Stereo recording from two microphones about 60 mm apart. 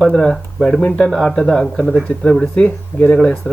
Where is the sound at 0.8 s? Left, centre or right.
Left.